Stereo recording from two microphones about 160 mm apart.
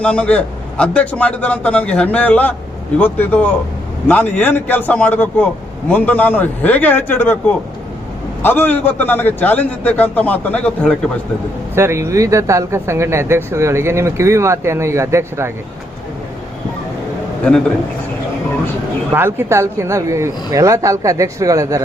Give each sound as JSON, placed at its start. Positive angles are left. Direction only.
{"t": 0.0, "sound": "a man's voice", "side_deg": 5}
{"t": 11.7, "sound": "speech", "side_deg": -15}
{"t": 19.1, "sound": "speech", "side_deg": -15}